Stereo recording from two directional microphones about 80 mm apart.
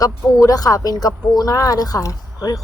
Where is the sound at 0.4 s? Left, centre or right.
Left.